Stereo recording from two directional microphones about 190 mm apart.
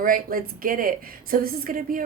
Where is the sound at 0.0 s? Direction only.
45° right (ahead or behind).